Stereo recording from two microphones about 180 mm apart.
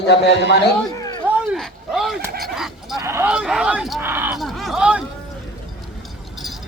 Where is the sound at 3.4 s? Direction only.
5° right (ahead or behind).